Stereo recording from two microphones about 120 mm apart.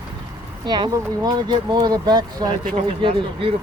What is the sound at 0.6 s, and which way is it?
Speech, 35° right (ahead or behind).